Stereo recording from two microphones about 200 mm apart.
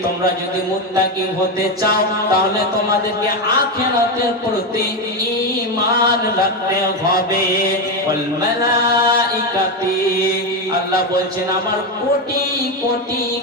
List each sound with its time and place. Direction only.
1.8 s music: 50° left (ahead or behind)
6.0 s music: 50° left (ahead or behind)
8.8 s music: 50° left (ahead or behind)